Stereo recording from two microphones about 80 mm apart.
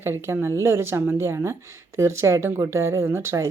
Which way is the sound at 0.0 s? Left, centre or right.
Right.